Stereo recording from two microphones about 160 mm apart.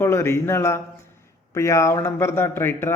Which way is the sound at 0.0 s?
15° left (ahead or behind).